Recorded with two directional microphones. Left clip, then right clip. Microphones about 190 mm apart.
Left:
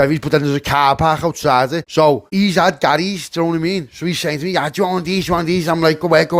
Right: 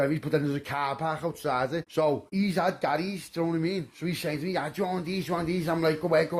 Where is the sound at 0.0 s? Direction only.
45° left (ahead or behind).